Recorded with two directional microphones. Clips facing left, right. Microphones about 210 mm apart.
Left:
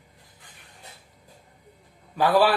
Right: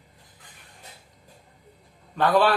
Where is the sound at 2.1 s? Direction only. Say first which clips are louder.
Left 1 dB; 5° left (ahead or behind).